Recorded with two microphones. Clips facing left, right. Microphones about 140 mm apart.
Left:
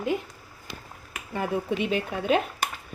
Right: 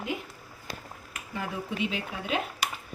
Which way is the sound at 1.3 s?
55° left (ahead or behind).